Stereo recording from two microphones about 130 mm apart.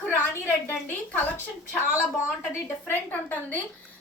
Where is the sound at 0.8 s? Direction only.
15° left (ahead or behind).